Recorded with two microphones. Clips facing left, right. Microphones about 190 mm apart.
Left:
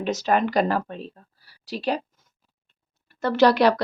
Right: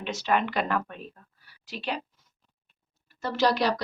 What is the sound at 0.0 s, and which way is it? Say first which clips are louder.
Speech: left 5 dB; 40° left (ahead or behind).